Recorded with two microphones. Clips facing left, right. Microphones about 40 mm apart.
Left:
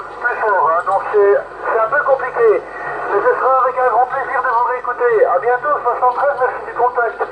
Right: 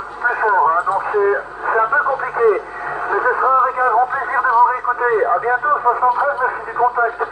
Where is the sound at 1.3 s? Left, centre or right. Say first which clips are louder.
Left 3 dB; centre.